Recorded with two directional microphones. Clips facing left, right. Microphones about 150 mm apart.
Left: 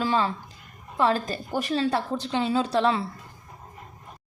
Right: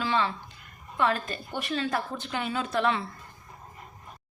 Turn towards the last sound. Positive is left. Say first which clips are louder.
# left 4 dB
turn(degrees=30)  # may be behind; listen again after turning